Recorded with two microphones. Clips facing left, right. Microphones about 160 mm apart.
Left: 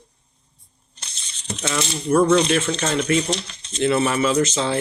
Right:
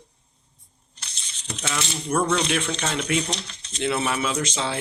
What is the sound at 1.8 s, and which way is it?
Speech, 10° left (ahead or behind).